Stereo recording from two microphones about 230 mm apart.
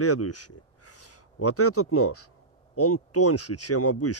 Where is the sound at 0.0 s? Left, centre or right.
Left.